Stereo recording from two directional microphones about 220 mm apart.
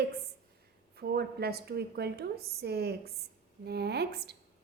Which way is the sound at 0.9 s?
45° right (ahead or behind).